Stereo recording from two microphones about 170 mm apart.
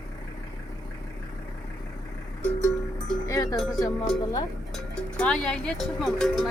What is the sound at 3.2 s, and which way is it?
Cowbell, 20° left (ahead or behind).